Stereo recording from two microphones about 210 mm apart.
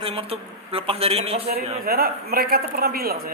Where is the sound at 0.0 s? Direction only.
25° right (ahead or behind).